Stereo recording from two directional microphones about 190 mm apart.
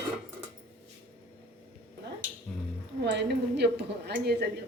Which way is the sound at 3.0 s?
60° right (ahead or behind).